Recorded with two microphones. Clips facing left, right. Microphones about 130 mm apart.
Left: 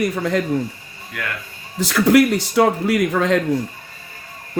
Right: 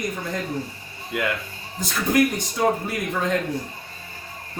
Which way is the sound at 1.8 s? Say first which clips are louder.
Left 7 dB; 85° left.